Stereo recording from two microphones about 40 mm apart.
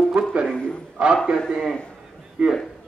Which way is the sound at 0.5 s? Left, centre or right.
Left.